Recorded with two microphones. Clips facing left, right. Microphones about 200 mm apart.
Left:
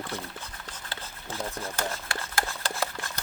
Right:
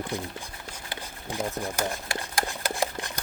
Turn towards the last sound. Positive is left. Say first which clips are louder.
# right 3 dB
turn(degrees=-15)  # may be behind; listen again after turning